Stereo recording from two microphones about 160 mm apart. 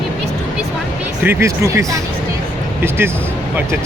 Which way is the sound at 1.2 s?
15° right (ahead or behind).